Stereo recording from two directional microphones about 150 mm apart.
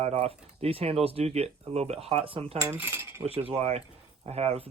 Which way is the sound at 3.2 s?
40° right (ahead or behind).